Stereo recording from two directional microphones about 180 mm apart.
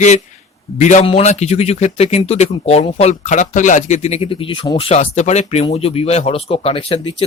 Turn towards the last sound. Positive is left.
turn(degrees=30)  # may be behind; listen again after turning